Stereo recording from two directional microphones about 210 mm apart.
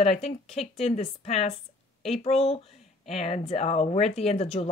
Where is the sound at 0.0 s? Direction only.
30° left (ahead or behind).